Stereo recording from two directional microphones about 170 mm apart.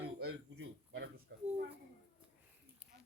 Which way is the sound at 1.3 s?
75° right (ahead or behind).